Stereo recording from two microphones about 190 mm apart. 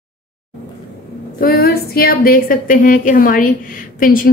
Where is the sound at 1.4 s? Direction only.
55° left (ahead or behind).